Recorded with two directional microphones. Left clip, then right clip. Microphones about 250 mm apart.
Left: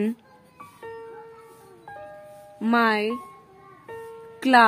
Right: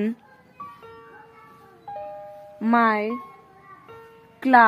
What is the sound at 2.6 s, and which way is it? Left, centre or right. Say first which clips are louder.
Speech: right 1 dB; centre.